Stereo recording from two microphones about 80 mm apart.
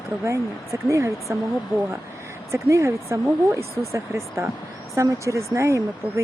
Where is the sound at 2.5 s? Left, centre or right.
Right.